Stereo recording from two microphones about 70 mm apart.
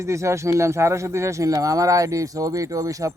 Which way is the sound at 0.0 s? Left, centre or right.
Right.